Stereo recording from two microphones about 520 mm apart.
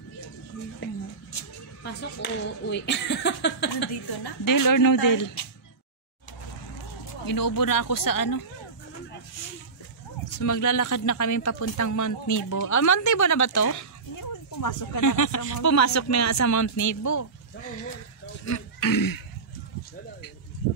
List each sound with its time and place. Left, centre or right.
0.8 s a sound: left
4.2 s speech: left
7.2 s speech: left
10.2 s speech: left
18.4 s throat clearing: left